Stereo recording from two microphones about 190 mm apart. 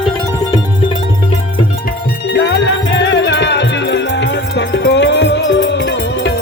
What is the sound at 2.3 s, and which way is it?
Music, 60° left (ahead or behind).